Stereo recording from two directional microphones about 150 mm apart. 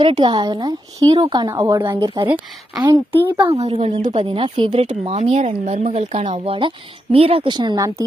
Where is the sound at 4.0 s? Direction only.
55° right (ahead or behind).